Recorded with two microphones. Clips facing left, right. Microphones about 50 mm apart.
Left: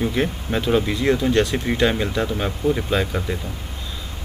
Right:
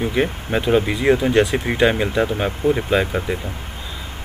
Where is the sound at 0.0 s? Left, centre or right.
Centre.